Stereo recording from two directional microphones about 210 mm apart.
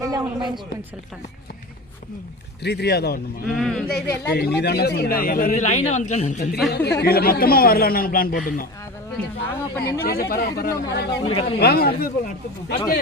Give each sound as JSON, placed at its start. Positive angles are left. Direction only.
{"t": 0.0, "sound": "speech", "side_deg": -15}
{"t": 2.6, "sound": "a man's voice", "side_deg": 50}
{"t": 3.4, "sound": "speech", "side_deg": 0}
{"t": 4.3, "sound": "a man's voice", "side_deg": 50}
{"t": 6.7, "sound": "a man's voice", "side_deg": 50}
{"t": 9.1, "sound": "speech", "side_deg": 10}
{"t": 10.0, "sound": "a man's voice", "side_deg": 45}
{"t": 11.3, "sound": "speech", "side_deg": 25}
{"t": 11.6, "sound": "a man's voice", "side_deg": 50}